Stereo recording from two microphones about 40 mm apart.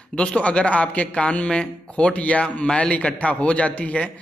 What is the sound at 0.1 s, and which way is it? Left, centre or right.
A man's voice, left.